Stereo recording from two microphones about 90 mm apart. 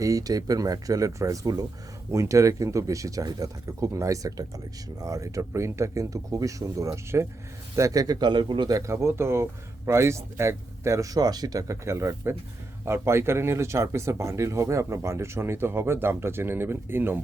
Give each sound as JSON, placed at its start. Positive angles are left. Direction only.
{"t": 0.0, "sound": "speech", "side_deg": -40}
{"t": 8.7, "sound": "speech", "side_deg": -30}